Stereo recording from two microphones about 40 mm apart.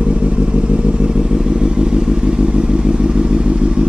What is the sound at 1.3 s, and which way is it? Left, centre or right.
Vehicle, right.